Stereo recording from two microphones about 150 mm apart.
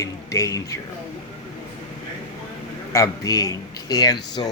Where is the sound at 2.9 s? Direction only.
20° left (ahead or behind).